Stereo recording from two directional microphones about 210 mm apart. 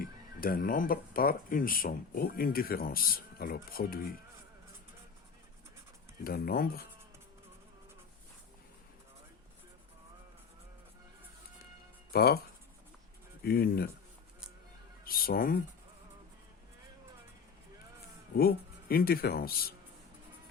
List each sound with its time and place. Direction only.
0.0 s speech: 45° left (ahead or behind)
6.2 s speech: 45° left (ahead or behind)
12.1 s speech: 45° left (ahead or behind)
13.4 s speech: 45° left (ahead or behind)
15.0 s speech: 45° left (ahead or behind)
18.3 s speech: 45° left (ahead or behind)